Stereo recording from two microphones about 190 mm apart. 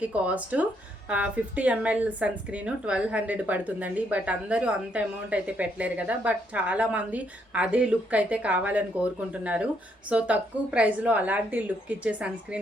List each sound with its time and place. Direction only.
0.0 s a woman's voice: 5° right (ahead or behind)